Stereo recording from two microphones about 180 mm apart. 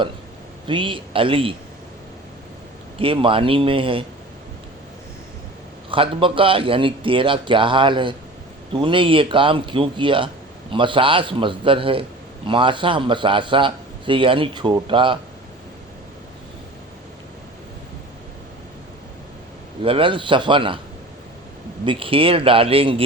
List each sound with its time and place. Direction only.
0.7 s a man's voice: 30° right (ahead or behind)
3.0 s a man's voice: 30° right (ahead or behind)
5.9 s a man's voice: 30° right (ahead or behind)
19.8 s a man's voice: 30° right (ahead or behind)
21.8 s speech: 30° right (ahead or behind)